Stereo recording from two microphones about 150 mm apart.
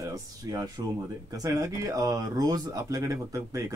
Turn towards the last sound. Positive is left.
turn(degrees=-25)  # may be behind; listen again after turning